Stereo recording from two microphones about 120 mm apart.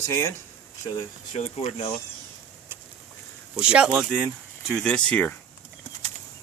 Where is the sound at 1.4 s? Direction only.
60° left (ahead or behind).